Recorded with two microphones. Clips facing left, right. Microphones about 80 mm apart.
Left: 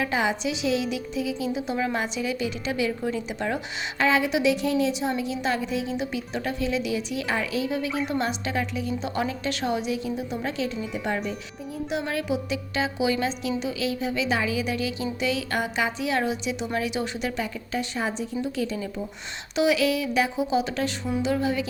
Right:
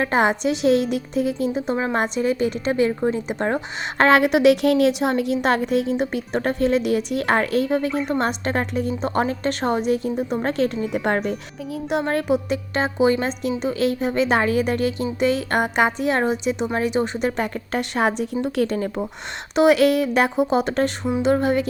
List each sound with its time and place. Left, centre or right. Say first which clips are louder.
0.0 s a woman's voice: right 6 dB; right
3.9 s a woman's voice: right 7 dB; right